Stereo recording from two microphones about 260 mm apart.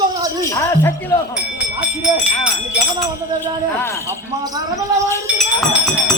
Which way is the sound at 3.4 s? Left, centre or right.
Centre.